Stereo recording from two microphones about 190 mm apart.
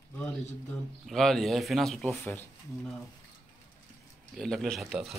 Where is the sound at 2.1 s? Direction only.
10° left (ahead or behind).